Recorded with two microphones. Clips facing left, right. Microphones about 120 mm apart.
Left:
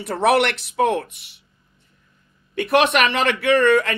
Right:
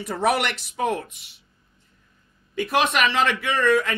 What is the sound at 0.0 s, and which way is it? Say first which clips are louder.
Speech: left 5 dB; 65° left (ahead or behind).